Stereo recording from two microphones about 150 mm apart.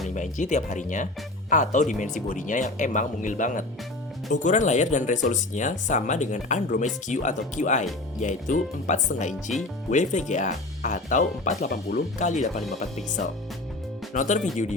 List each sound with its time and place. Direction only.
0.1 s speech: 55° left (ahead or behind); by 12.0 s 85° left
12.2 s speech: 55° left (ahead or behind)